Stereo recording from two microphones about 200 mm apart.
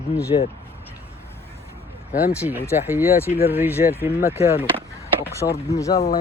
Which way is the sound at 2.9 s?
10° right (ahead or behind).